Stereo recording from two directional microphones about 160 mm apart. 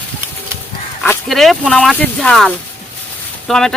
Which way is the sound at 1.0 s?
Centre (ahead or behind).